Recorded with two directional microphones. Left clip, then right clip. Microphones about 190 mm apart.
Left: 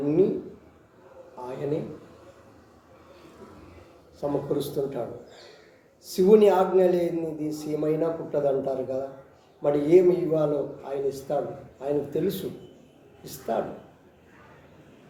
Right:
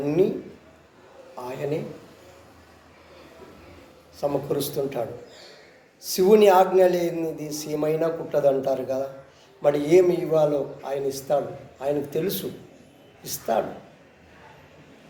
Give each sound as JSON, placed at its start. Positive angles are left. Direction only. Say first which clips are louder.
{"t": 0.2, "sound": "a man's voice", "louder": "right 2 dB", "side_deg": 15}
{"t": 4.2, "sound": "a man's voice", "louder": "right 2 dB", "side_deg": 15}